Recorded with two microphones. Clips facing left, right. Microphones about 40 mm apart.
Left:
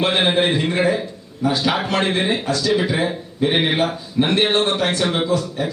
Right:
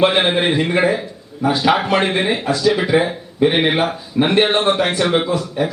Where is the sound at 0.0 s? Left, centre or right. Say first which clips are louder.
Right 3 dB; centre.